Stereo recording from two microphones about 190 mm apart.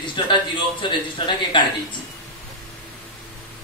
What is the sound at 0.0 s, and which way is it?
A man's voice, 25° left (ahead or behind).